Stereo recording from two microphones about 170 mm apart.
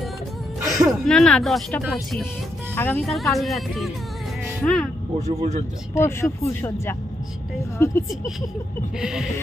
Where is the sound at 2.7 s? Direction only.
10° left (ahead or behind).